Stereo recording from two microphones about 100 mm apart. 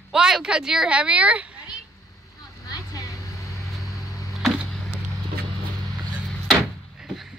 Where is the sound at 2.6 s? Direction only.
35° left (ahead or behind).